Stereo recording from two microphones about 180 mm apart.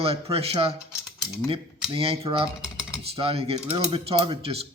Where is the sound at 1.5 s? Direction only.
30° right (ahead or behind).